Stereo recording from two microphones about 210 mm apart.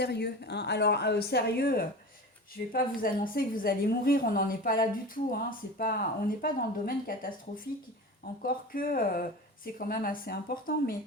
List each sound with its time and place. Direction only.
0.0 s a woman's voice: 50° left (ahead or behind)